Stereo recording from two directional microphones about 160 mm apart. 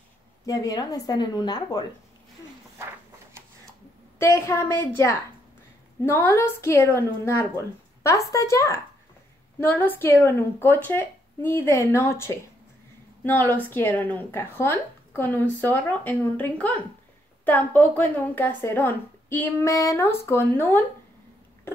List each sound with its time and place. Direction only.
0.5 s a woman's voice: 20° left (ahead or behind)
4.2 s speech: 20° left (ahead or behind)
6.0 s a woman's voice: 15° left (ahead or behind)